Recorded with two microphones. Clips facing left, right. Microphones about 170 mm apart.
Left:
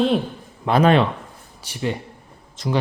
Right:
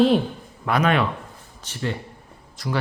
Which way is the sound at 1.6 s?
15° left (ahead or behind).